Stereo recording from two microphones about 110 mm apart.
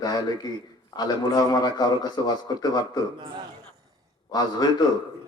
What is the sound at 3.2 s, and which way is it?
Speech, 45° right (ahead or behind).